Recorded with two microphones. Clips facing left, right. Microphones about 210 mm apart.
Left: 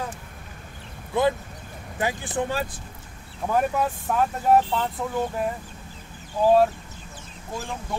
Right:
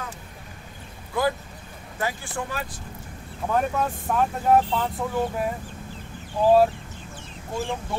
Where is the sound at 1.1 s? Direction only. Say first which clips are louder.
Left 3 dB; 20° left (ahead or behind).